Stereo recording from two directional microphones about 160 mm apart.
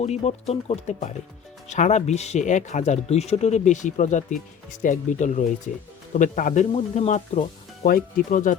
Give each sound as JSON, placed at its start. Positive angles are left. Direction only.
{"t": 0.0, "sound": "speech", "side_deg": 45}